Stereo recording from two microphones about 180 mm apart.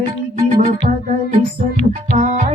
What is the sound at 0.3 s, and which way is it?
Music, 35° right (ahead or behind).